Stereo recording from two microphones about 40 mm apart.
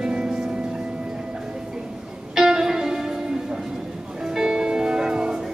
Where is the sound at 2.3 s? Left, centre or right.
Centre.